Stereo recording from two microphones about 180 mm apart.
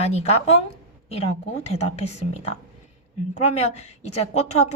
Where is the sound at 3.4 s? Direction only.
35° left (ahead or behind).